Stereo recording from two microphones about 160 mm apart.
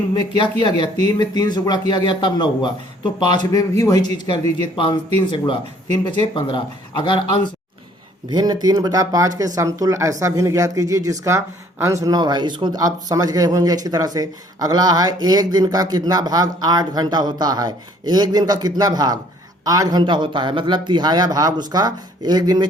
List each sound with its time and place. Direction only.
0.1 s a man's voice: 30° left (ahead or behind)
8.3 s speech: 25° right (ahead or behind)